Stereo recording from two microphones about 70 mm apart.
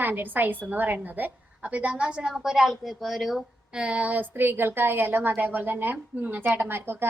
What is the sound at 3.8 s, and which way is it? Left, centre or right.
A woman's voice, centre.